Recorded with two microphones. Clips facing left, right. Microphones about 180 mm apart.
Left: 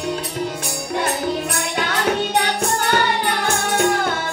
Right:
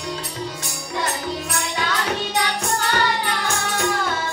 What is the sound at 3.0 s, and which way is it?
Music, 60° left (ahead or behind).